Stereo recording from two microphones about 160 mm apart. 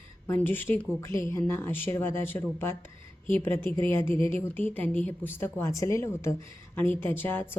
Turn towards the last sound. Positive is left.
turn(degrees=15)  # may be behind; listen again after turning